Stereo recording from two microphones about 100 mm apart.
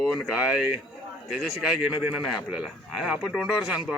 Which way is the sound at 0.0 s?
Centre (ahead or behind).